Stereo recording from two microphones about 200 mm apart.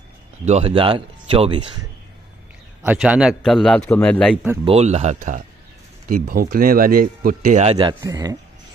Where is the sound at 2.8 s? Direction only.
5° right (ahead or behind).